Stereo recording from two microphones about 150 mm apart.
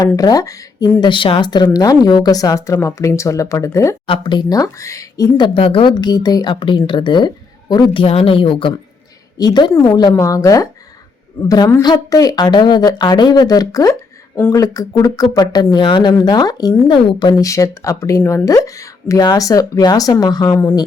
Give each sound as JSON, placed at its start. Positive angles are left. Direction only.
{"t": 0.2, "sound": "speech", "side_deg": 25}
{"t": 1.0, "sound": "speech", "side_deg": 35}
{"t": 4.0, "sound": "speech", "side_deg": 30}
{"t": 5.5, "sound": "speech", "side_deg": 35}